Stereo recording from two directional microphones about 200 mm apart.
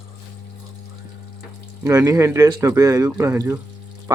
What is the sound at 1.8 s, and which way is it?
Speech, 15° right (ahead or behind).